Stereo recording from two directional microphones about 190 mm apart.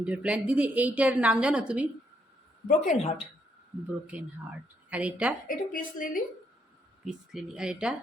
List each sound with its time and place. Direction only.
0.0 s a woman's voice: 5° right (ahead or behind)
2.6 s speech: 40° left (ahead or behind)
4.9 s a woman's voice: 5° right (ahead or behind)
5.5 s a woman's voice: 45° left (ahead or behind)
7.0 s speech: 5° right (ahead or behind)